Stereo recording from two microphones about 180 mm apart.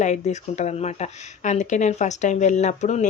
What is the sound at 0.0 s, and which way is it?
Speech, 40° left (ahead or behind).